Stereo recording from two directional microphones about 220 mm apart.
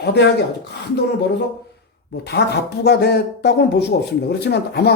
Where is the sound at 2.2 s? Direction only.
50° left (ahead or behind).